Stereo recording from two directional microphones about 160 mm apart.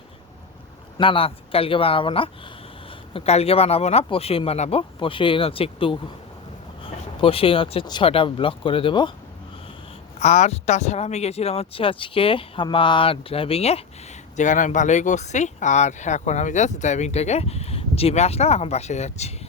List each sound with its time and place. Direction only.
0.9 s speech: 35° left (ahead or behind)
10.2 s speech: 45° left (ahead or behind)
14.3 s speech: 50° left (ahead or behind)